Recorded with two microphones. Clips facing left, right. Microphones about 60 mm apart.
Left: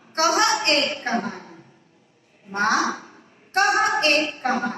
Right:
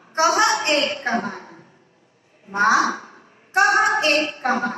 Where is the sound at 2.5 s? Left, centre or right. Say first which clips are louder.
Right 4 dB; right.